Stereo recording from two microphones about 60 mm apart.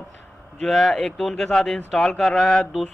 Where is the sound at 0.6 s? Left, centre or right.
Centre.